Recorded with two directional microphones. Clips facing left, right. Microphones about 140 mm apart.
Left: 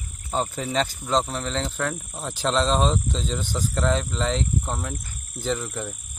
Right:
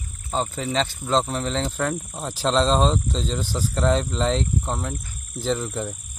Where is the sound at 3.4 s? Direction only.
35° right (ahead or behind).